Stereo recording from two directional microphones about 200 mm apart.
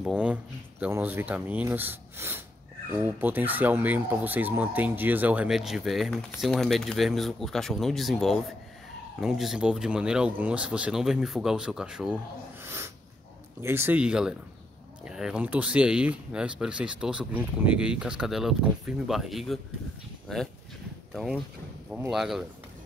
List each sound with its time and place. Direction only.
0.0 s speech: 5° right (ahead or behind)
12.6 s dog: 10° right (ahead or behind)
13.6 s speech: 10° right (ahead or behind)